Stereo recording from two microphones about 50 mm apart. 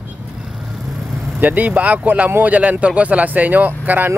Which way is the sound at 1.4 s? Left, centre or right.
Right.